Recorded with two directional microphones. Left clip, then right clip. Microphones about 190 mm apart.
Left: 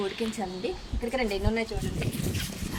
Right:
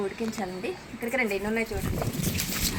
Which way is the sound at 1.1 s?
10° left (ahead or behind).